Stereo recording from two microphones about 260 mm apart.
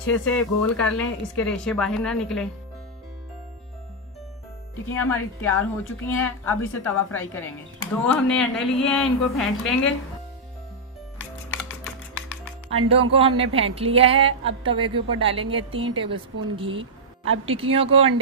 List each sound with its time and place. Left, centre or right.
0.0 s speech: centre
5.0 s a woman's voice: centre
12.7 s speech: right
13.1 s a woman's voice: right